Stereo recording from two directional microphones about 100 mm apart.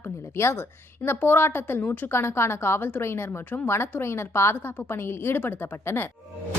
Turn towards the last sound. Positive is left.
turn(degrees=20)  # may be behind; listen again after turning